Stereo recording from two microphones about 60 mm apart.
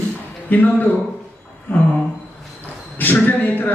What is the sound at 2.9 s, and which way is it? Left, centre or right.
Speech, left.